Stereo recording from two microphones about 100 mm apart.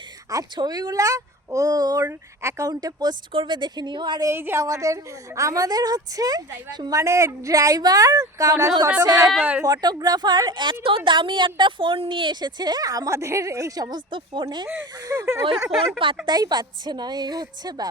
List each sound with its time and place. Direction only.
0.3 s a woman's voice: 40° right (ahead or behind)
2.0 s a woman's voice: 30° right (ahead or behind); by 4.2 s 50° right (ahead or behind)
4.2 s a woman's voice: 25° right (ahead or behind); by 7.0 s 40° right (ahead or behind)
7.0 s a woman's voice: 30° right (ahead or behind)
9.4 s speech: 15° right (ahead or behind)
9.6 s speech: 45° right (ahead or behind)
14.9 s a woman's voice: 35° right (ahead or behind)
16.2 s speech: 45° right (ahead or behind)